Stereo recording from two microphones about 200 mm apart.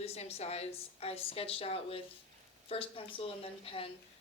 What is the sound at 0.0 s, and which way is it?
A woman's voice, 30° left (ahead or behind).